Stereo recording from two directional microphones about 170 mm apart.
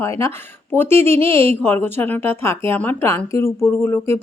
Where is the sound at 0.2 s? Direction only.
15° left (ahead or behind).